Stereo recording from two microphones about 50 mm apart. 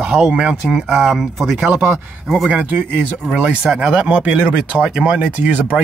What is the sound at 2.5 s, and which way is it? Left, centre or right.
A man's voice, right.